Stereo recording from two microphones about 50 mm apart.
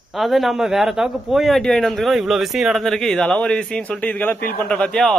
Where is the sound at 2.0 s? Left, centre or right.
Centre.